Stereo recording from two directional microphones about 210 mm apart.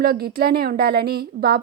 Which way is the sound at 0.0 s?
45° right (ahead or behind).